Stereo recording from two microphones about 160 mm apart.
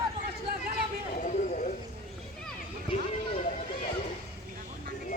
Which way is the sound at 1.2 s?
50° left (ahead or behind).